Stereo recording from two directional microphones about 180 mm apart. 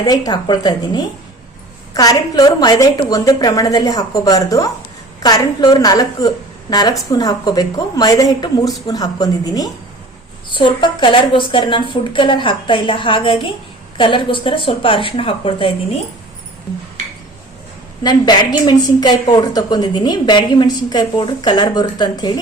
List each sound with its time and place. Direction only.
0.0 s a woman's voice: 20° left (ahead or behind)
18.0 s a woman's voice: 25° left (ahead or behind)